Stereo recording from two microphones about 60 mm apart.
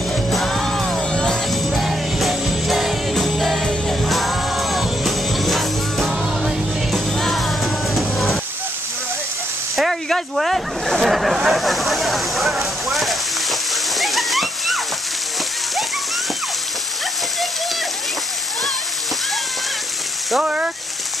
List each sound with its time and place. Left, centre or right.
0.3 s music: centre
1.1 s music: centre
1.5 s music: centre
7.2 s music: centre
9.8 s a sound: centre
20.4 s a sound: centre